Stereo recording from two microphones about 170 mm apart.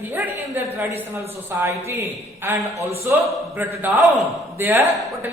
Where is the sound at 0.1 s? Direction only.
10° right (ahead or behind).